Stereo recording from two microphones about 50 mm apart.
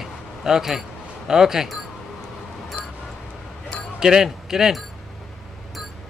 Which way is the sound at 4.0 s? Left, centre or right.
Centre.